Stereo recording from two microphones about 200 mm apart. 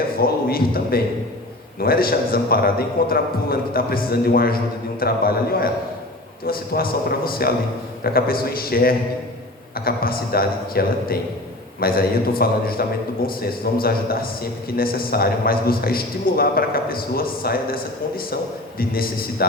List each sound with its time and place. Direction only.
0.2 s a man's voice: 50° left (ahead or behind)
18.8 s a man's voice: 50° left (ahead or behind)